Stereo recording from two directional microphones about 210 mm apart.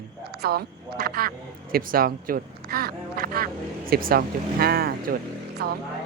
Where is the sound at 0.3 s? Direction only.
50° right (ahead or behind).